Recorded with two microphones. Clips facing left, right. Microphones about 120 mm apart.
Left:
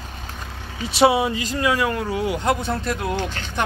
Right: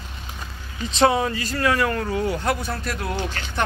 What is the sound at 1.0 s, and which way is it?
A man's voice, 10° left (ahead or behind).